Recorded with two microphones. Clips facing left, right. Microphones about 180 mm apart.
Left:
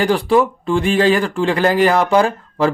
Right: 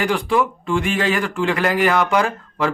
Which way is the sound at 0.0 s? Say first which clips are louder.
Left 5 dB; 35° left (ahead or behind).